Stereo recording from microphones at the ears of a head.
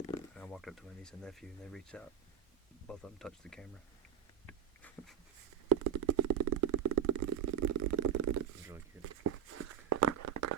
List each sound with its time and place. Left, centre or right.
0.4 s speech: centre
5.6 s stomach rumble: right